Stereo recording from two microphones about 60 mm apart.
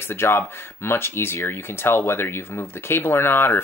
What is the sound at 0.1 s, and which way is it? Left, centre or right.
Speech, left.